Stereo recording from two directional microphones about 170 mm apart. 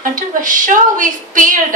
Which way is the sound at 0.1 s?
50° right (ahead or behind).